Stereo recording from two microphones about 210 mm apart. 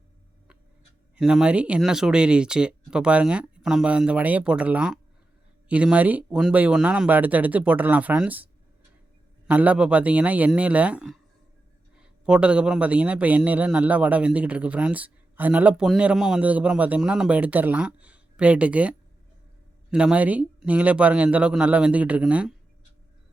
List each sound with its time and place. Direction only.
1.1 s a man's voice: 5° right (ahead or behind)
9.5 s a man's voice: 5° right (ahead or behind)